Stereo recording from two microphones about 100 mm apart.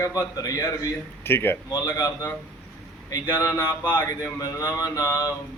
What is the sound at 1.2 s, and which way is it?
Speech, 20° left (ahead or behind).